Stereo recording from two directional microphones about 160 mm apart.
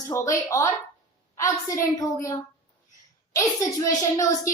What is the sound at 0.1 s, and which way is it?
Speech, 20° left (ahead or behind).